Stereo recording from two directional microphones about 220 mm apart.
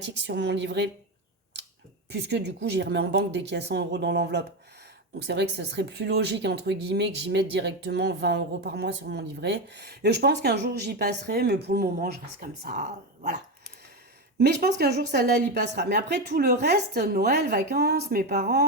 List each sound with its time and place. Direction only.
0.0 s speech: 50° right (ahead or behind)
2.0 s speech: 50° right (ahead or behind); by 13.3 s 35° right (ahead or behind)
14.3 s speech: 45° right (ahead or behind)